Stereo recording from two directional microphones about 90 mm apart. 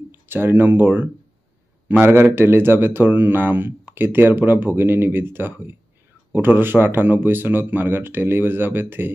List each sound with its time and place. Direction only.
0.1 s a man's voice: 25° right (ahead or behind)